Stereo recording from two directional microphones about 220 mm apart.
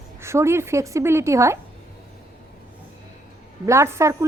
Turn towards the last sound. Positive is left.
turn(degrees=-15)  # may be behind; listen again after turning